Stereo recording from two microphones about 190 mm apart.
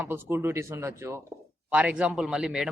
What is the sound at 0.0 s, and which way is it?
Speech, 10° right (ahead or behind).